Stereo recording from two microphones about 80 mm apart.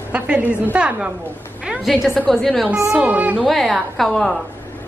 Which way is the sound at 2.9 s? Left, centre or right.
Centre.